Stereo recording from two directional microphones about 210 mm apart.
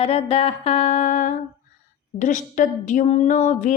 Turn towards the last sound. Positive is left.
turn(degrees=35)  # may be behind; listen again after turning